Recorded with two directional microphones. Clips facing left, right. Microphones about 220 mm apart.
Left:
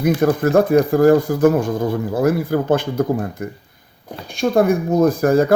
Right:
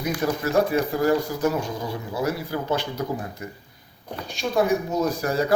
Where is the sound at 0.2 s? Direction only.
50° left (ahead or behind).